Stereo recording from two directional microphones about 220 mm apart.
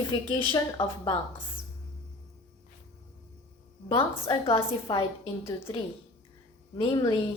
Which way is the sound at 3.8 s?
25° left (ahead or behind).